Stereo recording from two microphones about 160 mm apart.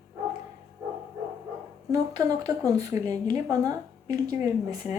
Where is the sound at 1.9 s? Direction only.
20° right (ahead or behind).